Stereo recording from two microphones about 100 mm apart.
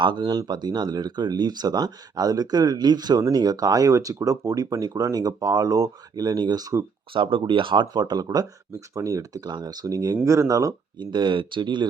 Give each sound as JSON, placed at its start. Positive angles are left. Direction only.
{"t": 0.0, "sound": "speech", "side_deg": -50}
{"t": 7.1, "sound": "speech", "side_deg": -60}
{"t": 11.0, "sound": "speech", "side_deg": -50}